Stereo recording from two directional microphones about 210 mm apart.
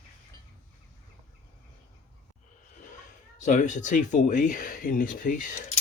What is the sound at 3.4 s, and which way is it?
Speech, 35° left (ahead or behind).